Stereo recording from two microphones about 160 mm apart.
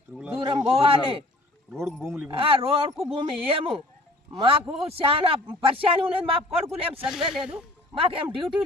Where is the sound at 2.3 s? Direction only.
35° right (ahead or behind).